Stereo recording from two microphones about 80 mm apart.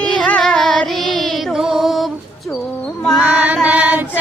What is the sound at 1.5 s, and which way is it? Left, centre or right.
Music, centre.